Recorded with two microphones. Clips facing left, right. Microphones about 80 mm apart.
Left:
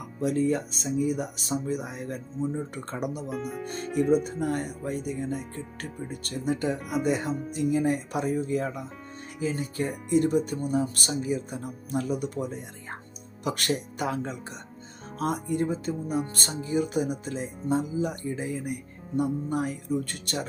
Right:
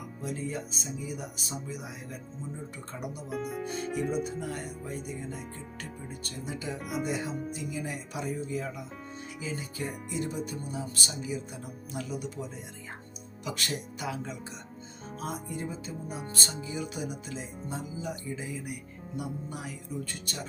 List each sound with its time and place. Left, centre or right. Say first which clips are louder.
0.2 s speech: left 11 dB; left
2.7 s speech: left 7 dB; left
3.2 s speech: left 1 dB; centre
4.2 s speech: left 5 dB; left
6.7 s speech: left 5 dB; centre
7.0 s speech: left 6 dB; left
15.2 s speech: left 9 dB; left
16.6 s speech: left 14 dB; left